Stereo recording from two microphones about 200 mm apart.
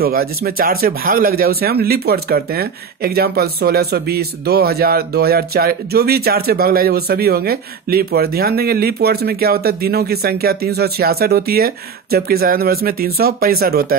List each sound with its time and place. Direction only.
0.0 s speech: 50° right (ahead or behind)